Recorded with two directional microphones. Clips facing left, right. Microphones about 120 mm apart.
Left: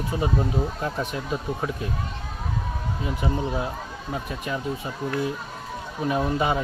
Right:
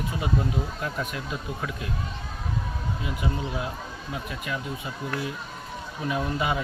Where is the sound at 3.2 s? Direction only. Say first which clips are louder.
Left 5 dB; 25° left (ahead or behind).